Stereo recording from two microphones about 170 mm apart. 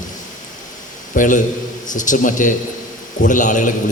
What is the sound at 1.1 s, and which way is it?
A man's voice, 50° left (ahead or behind).